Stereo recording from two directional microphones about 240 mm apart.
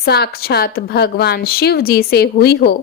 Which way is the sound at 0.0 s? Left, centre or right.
Left.